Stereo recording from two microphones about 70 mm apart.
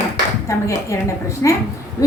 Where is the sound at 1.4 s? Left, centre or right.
Left.